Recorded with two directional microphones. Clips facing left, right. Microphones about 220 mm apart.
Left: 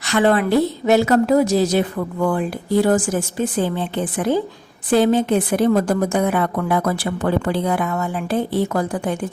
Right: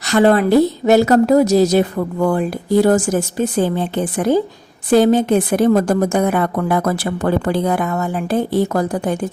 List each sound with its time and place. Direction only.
0.1 s speech: 40° right (ahead or behind)
2.8 s a woman's voice: 40° right (ahead or behind)